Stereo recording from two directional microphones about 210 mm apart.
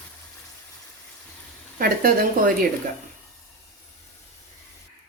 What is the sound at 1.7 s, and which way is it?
Speech, 45° right (ahead or behind).